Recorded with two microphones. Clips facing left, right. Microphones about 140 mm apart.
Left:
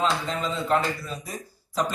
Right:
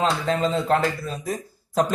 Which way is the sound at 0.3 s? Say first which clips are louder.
Right 4 dB; 50° right (ahead or behind).